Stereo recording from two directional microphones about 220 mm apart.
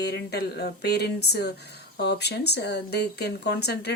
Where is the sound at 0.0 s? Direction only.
50° left (ahead or behind).